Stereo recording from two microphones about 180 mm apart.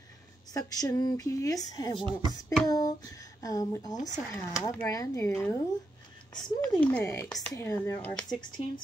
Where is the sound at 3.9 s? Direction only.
40° left (ahead or behind).